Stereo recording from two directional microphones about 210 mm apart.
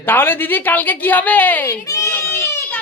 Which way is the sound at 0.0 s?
10° left (ahead or behind).